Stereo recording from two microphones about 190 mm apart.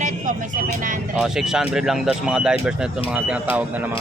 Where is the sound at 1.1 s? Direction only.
5° right (ahead or behind).